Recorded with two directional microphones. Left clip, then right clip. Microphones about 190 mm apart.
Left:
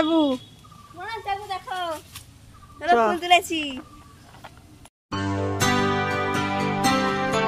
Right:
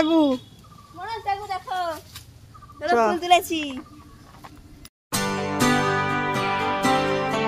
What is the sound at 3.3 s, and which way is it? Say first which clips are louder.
Speech: even; 20° right (ahead or behind).